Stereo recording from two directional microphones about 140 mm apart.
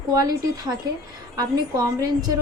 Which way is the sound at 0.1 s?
25° right (ahead or behind).